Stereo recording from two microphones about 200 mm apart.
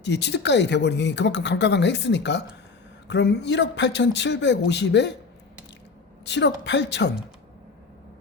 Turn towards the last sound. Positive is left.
turn(degrees=60)  # may be behind; listen again after turning